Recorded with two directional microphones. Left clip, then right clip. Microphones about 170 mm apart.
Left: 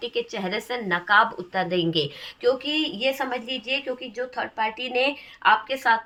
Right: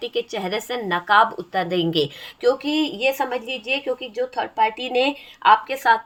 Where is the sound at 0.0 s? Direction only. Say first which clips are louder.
Right 3 dB; 35° right (ahead or behind).